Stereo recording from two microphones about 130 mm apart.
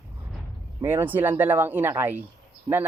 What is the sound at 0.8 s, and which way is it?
Speech, 15° right (ahead or behind).